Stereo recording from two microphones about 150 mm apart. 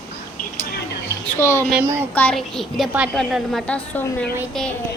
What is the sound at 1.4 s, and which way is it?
Speech, 20° left (ahead or behind).